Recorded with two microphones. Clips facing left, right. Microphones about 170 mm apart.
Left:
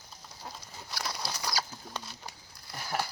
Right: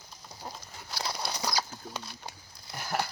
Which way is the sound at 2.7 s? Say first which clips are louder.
Right 2 dB; centre (ahead or behind).